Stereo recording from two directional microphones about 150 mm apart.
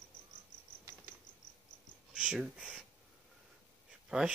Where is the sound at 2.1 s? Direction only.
5° right (ahead or behind).